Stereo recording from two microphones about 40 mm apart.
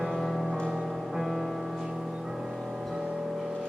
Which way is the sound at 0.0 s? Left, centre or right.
Centre.